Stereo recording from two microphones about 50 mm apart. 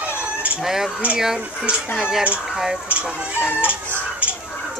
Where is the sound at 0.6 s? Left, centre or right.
Centre.